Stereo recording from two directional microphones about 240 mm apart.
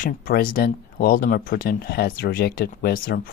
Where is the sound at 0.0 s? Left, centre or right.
Left.